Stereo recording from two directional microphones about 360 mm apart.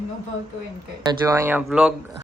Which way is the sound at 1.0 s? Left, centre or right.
Centre.